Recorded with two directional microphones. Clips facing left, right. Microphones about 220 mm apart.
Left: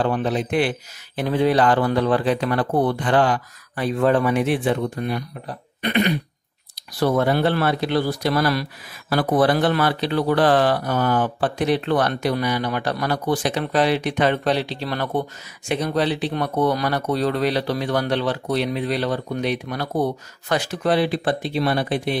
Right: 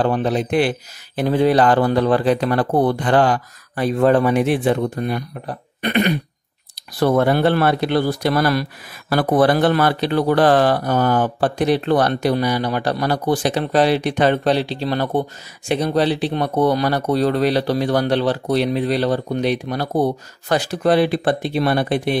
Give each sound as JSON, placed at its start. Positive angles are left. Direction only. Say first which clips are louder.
{"t": 0.0, "sound": "speech", "louder": "right 3 dB", "side_deg": -40}